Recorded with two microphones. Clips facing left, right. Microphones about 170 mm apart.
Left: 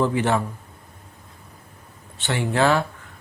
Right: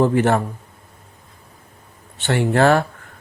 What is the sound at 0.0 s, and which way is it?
Speech, 50° right (ahead or behind).